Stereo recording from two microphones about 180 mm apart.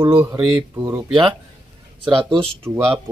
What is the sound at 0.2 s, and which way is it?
Speech, 15° right (ahead or behind).